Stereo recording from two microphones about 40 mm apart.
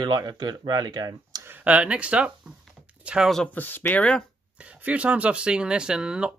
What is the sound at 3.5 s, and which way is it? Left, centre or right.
Speech, left.